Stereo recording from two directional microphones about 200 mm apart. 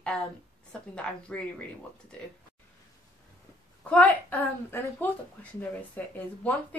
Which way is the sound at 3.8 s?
5° left (ahead or behind).